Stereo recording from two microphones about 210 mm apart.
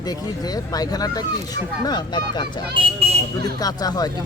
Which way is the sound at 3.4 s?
20° left (ahead or behind).